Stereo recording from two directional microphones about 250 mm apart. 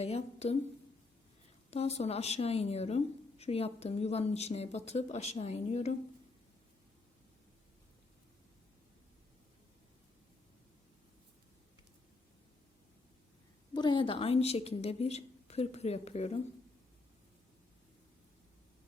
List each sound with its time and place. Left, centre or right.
0.0 s a woman's voice: left
1.7 s a woman's voice: left
13.7 s a woman's voice: centre